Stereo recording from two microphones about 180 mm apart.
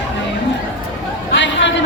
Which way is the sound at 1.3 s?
80° left.